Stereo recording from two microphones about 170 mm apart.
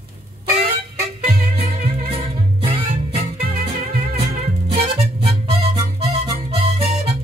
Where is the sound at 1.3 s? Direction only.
55° right (ahead or behind).